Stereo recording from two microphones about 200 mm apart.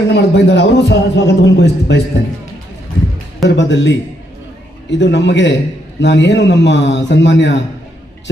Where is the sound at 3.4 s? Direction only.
65° left (ahead or behind).